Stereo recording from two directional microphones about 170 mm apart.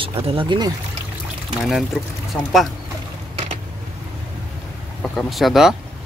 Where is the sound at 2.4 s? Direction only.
5° left (ahead or behind).